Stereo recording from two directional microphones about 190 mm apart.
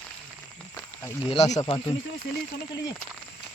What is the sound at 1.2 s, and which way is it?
Speech, 35° left (ahead or behind).